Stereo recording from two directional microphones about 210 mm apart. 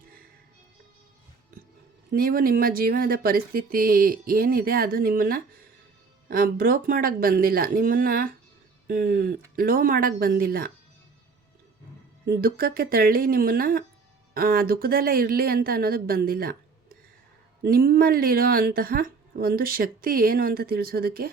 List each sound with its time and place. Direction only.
2.0 s a woman's voice: 45° right (ahead or behind)
12.2 s a woman's voice: 45° right (ahead or behind)